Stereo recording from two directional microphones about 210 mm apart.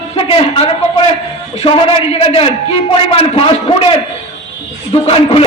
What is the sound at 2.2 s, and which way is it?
A man's voice, 25° left (ahead or behind).